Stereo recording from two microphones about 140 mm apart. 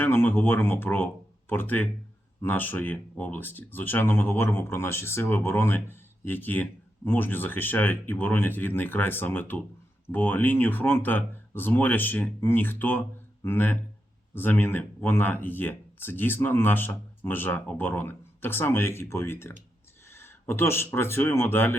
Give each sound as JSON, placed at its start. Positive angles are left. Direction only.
{"t": 0.0, "sound": "speech", "side_deg": 15}